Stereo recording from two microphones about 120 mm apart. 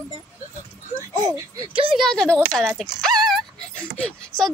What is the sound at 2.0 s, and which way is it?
Speech, 5° left (ahead or behind).